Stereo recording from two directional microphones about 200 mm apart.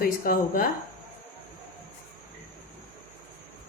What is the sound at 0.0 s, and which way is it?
Speech, 45° left (ahead or behind).